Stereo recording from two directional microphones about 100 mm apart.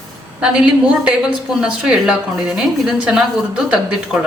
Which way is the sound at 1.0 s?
10° right (ahead or behind).